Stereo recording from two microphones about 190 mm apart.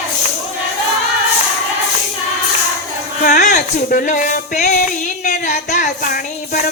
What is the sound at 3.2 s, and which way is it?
Speech, 45° left (ahead or behind).